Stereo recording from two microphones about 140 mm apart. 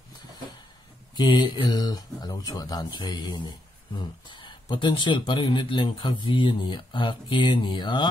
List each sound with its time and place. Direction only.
1.1 s speech: 30° left (ahead or behind)